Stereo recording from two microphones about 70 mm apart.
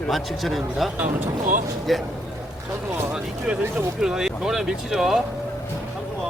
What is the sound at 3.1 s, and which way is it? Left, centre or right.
Speech, centre.